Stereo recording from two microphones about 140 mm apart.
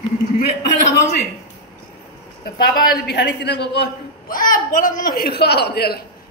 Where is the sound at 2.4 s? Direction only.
90° left.